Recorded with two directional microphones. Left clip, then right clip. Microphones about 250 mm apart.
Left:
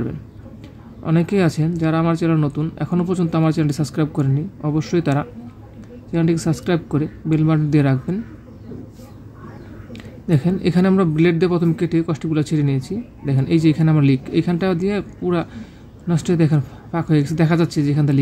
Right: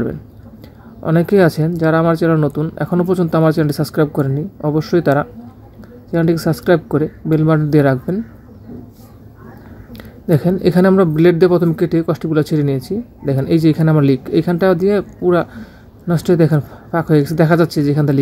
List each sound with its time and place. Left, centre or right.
1.0 s speech: right
9.9 s speech: right